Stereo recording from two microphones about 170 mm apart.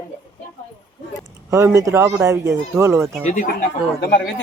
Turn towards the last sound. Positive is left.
turn(degrees=60)  # may be behind; listen again after turning